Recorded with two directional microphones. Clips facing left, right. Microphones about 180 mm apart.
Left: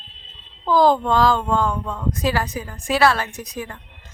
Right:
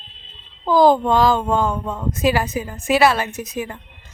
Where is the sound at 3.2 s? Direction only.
5° right (ahead or behind).